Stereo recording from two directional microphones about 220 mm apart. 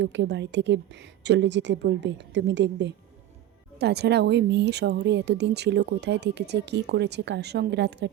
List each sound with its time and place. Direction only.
0.0 s speech: 50° right (ahead or behind)